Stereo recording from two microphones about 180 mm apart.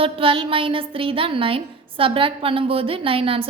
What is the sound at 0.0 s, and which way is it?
A woman's voice, 30° right (ahead or behind).